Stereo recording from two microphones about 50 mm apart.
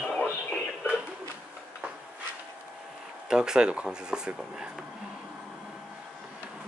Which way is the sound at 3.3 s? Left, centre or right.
Centre.